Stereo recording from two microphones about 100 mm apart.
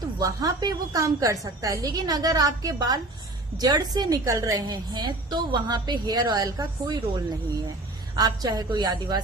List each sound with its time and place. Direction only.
0.0 s a woman's voice: 35° right (ahead or behind)